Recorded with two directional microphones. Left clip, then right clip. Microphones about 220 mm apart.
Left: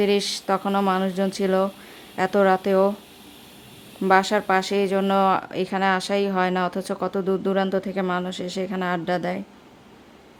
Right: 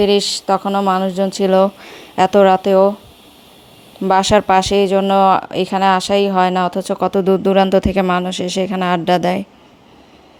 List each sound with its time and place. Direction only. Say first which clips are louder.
0.0 s speech: right 7 dB; 15° right (ahead or behind)
4.0 s speech: right 6 dB; 20° right (ahead or behind)